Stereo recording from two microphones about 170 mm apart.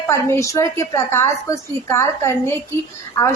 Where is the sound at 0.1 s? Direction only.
15° left (ahead or behind).